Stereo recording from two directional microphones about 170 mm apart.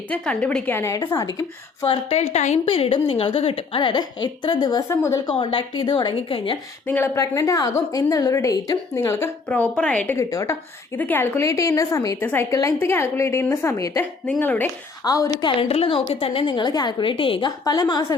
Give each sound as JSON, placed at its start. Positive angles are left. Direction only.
{"t": 0.1, "sound": "a woman's voice", "side_deg": 5}
{"t": 2.1, "sound": "a woman's voice", "side_deg": 40}
{"t": 5.3, "sound": "a woman's voice", "side_deg": 30}
{"t": 6.8, "sound": "a woman's voice", "side_deg": 15}
{"t": 9.5, "sound": "a woman's voice", "side_deg": 5}
{"t": 14.3, "sound": "a woman's voice", "side_deg": 5}
{"t": 15.0, "sound": "a woman's voice", "side_deg": 20}